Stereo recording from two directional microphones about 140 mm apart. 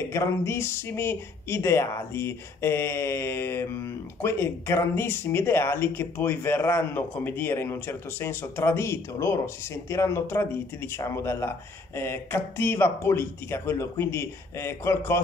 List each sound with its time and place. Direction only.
0.1 s speech: 20° left (ahead or behind)